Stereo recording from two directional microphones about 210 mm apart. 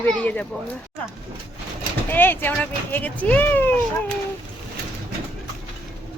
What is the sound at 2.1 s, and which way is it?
A woman's voice, 10° left (ahead or behind).